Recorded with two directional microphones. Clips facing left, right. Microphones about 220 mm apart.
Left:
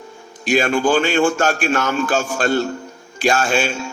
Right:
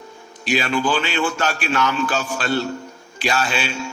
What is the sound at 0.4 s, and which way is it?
A man's voice, 50° left (ahead or behind).